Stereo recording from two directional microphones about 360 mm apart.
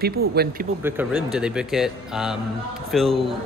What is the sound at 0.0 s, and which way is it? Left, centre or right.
Jingle bell, right.